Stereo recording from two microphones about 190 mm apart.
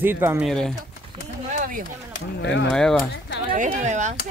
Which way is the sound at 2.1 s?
80° left.